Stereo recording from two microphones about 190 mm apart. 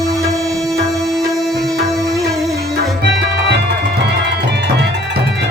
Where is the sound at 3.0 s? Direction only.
60° right (ahead or behind).